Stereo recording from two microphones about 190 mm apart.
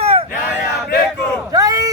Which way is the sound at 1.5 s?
20° right (ahead or behind).